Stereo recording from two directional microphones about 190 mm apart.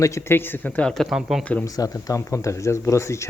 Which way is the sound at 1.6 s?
20° left (ahead or behind).